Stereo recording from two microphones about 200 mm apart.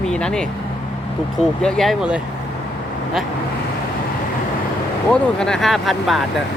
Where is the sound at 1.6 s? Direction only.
Centre (ahead or behind).